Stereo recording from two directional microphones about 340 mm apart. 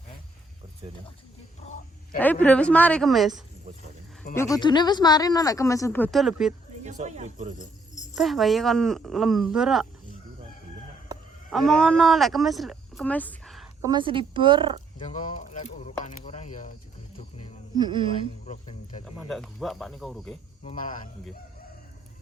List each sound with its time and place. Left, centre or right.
2.1 s speech: centre
4.4 s speech: centre
6.8 s speech: right
8.1 s speech: centre
11.5 s speech: centre
13.9 s a woman's voice: centre
14.9 s speech: left
17.2 s a sound: centre
17.7 s a woman's voice: centre
18.3 s speech: centre
19.1 s speech: centre
20.7 s speech: left